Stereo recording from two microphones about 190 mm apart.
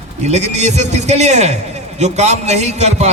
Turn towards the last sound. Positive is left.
turn(degrees=-35)  # may be behind; listen again after turning